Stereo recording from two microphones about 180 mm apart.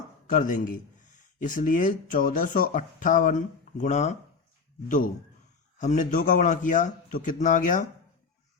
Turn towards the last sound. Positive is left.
turn(degrees=45)  # may be behind; listen again after turning